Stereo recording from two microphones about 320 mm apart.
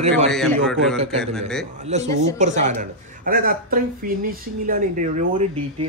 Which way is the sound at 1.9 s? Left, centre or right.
Right.